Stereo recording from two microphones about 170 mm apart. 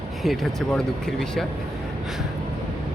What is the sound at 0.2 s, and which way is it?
Speech, centre (ahead or behind).